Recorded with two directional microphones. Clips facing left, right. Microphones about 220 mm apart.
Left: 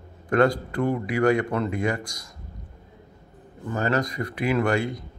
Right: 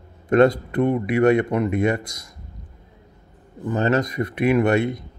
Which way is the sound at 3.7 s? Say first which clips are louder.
Right 4 dB; 20° right (ahead or behind).